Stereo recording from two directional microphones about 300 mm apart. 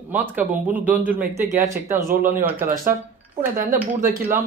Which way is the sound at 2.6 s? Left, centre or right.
Right.